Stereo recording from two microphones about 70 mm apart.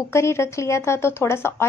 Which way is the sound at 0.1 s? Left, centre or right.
Left.